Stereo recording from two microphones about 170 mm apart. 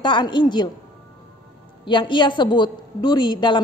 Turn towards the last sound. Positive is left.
turn(degrees=25)  # may be behind; listen again after turning